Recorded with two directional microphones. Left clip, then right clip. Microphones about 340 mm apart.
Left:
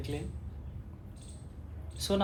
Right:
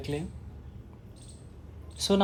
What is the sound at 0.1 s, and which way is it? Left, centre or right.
Speech, right.